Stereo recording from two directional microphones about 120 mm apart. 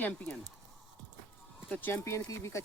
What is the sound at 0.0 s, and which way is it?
Speech, 10° left (ahead or behind).